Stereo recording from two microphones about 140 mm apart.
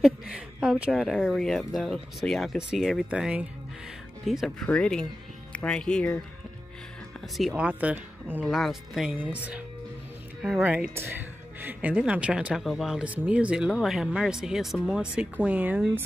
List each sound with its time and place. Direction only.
0.0 s speech: 5° right (ahead or behind)
7.2 s speech: centre (ahead or behind)